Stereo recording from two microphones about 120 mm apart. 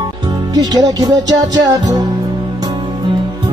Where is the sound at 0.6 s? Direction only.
35° right (ahead or behind).